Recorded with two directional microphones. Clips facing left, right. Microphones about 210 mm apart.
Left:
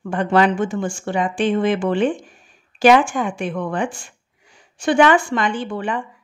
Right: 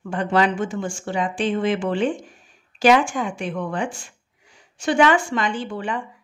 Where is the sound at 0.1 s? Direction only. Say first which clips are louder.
Left 3 dB; 55° left (ahead or behind).